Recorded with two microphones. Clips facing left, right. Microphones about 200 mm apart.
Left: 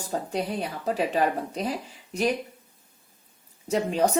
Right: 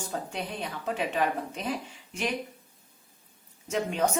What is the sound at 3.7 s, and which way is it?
Speech, 35° left (ahead or behind).